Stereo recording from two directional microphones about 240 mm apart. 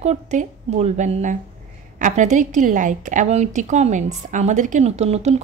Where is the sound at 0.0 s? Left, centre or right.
Right.